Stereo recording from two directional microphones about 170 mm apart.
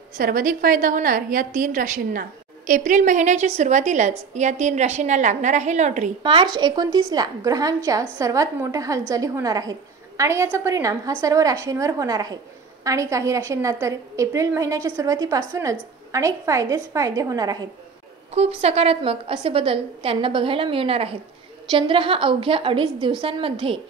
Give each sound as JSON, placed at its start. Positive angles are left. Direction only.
{"t": 0.2, "sound": "a woman's voice", "side_deg": -55}
{"t": 6.2, "sound": "a woman's voice", "side_deg": -30}
{"t": 18.6, "sound": "a woman's voice", "side_deg": -35}